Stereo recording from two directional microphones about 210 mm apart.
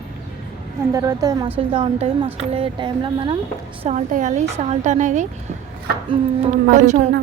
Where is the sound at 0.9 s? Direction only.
15° right (ahead or behind).